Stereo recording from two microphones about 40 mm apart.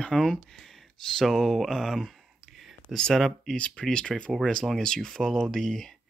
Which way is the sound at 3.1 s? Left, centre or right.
Centre.